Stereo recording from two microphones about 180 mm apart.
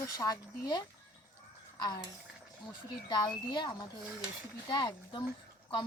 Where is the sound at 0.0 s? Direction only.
20° left (ahead or behind).